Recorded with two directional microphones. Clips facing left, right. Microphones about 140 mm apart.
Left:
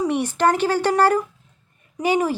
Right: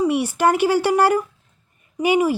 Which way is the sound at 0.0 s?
10° right (ahead or behind).